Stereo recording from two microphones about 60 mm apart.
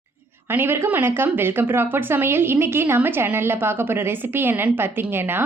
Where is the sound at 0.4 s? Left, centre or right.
Right.